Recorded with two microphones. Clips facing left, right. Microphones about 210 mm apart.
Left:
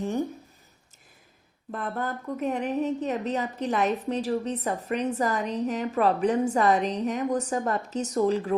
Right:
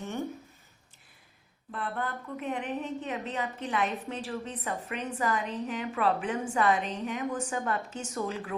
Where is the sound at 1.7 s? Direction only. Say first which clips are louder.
Left 4 dB; 40° left (ahead or behind).